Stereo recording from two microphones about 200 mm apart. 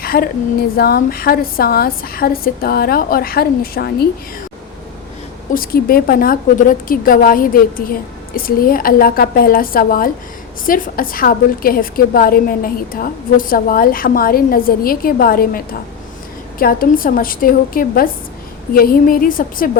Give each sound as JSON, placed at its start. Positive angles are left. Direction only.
{"t": 0.0, "sound": "a sound", "side_deg": 50}
{"t": 0.8, "sound": "a woman's voice", "side_deg": 50}
{"t": 5.5, "sound": "a woman's voice", "side_deg": 45}